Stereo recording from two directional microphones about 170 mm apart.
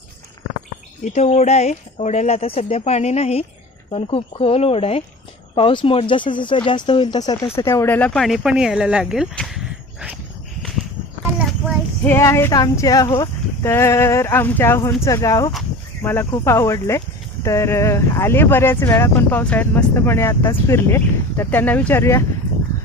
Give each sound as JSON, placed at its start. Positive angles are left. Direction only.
{"t": 1.0, "sound": "speech", "side_deg": 40}
{"t": 12.0, "sound": "speech", "side_deg": 15}